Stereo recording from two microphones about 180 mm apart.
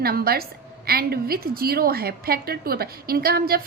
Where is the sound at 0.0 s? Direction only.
60° right (ahead or behind).